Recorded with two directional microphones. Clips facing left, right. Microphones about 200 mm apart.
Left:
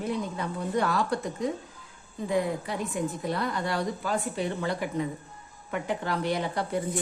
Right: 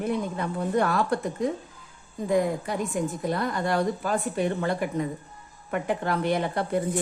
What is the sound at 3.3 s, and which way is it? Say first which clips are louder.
A woman's voice: right 5 dB; 50° right (ahead or behind).